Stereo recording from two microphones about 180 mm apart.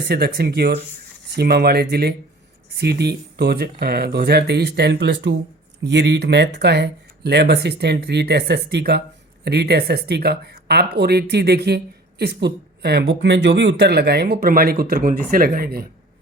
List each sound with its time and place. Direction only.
0.1 s speech: 65° right (ahead or behind)